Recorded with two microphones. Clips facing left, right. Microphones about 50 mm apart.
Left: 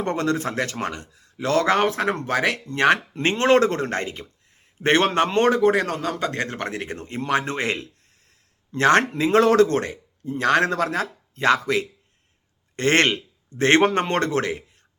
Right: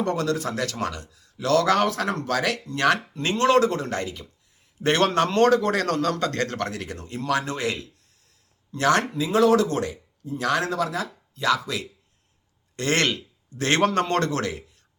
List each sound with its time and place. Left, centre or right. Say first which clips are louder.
0.0 s speech: left 1 dB; left